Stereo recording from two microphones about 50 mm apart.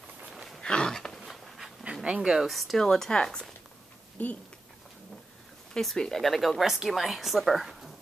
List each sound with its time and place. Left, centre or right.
0.3 s a sound: centre
0.6 s a sound: centre
1.2 s bee: centre
2.0 s speech: centre
2.4 s speech: centre
4.2 s speech: left
5.9 s a woman's voice: centre